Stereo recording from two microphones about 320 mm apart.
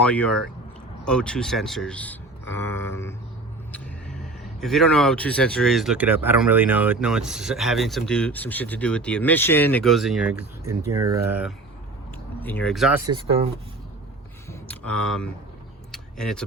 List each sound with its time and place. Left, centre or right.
0.0 s speech: centre
12.4 s speech: centre
13.1 s speech: centre
14.7 s speech: centre
15.9 s vehicle: centre